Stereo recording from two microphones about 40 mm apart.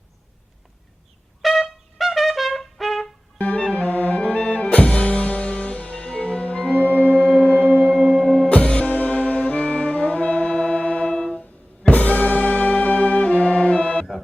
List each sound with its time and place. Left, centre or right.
1.4 s trumpet: centre
3.3 s music: left
6.8 s music: left
7.1 s singing bowl: left
8.2 s music: left
8.9 s brass instrument: left
11.9 s music: left